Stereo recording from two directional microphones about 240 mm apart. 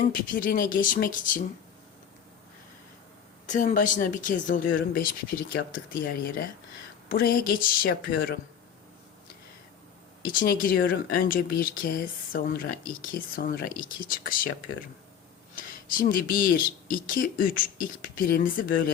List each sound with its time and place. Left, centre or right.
0.0 s speech: left
3.4 s speech: left
10.2 s speech: left
15.5 s speech: left